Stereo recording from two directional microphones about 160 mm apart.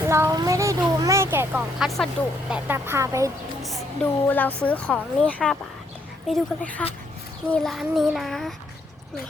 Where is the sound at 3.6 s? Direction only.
Centre (ahead or behind).